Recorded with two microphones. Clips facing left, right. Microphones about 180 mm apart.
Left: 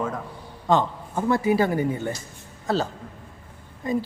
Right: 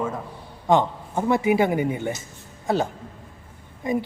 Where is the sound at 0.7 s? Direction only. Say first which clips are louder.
Right 2 dB; 20° right (ahead or behind).